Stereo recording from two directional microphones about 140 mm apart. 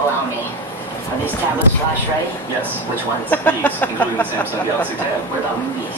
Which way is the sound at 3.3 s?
15° left (ahead or behind).